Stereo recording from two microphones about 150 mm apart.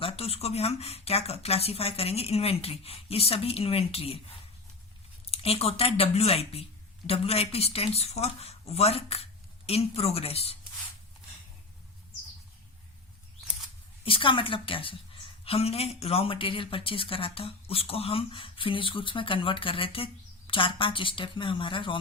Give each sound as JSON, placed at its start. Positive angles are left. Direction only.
{"t": 0.0, "sound": "a woman's voice", "side_deg": 40}
{"t": 5.2, "sound": "a woman's voice", "side_deg": 40}
{"t": 14.0, "sound": "a woman's voice", "side_deg": 35}